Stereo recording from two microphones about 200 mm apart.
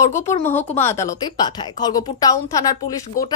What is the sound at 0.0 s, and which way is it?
A woman's voice, 15° left (ahead or behind).